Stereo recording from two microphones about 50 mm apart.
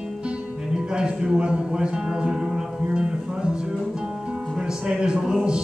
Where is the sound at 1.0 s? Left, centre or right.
Centre.